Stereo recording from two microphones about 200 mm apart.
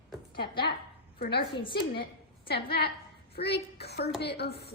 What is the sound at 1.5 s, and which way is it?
Speech, 25° left (ahead or behind).